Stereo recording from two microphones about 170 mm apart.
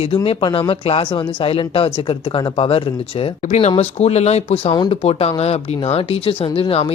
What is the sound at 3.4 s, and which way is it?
Speech, 45° left (ahead or behind).